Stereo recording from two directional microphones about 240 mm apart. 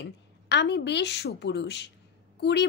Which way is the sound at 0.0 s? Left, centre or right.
Left.